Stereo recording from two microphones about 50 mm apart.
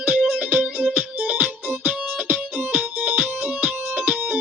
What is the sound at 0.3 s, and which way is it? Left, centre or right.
Music, right.